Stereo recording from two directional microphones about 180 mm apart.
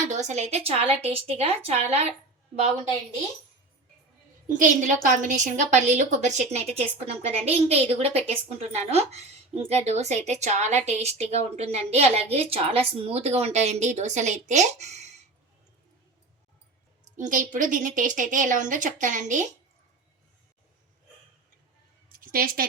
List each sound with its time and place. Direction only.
0.1 s a woman's voice: 40° right (ahead or behind)
4.4 s a woman's voice: 45° right (ahead or behind)
17.2 s a woman's voice: 45° right (ahead or behind)
22.2 s a woman's voice: 50° right (ahead or behind)